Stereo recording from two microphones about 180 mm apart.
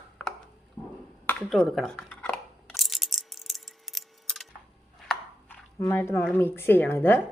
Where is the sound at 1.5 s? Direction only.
Centre (ahead or behind).